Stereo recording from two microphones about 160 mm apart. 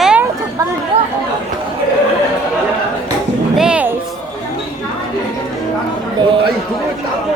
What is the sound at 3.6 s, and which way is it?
Music, 5° right (ahead or behind).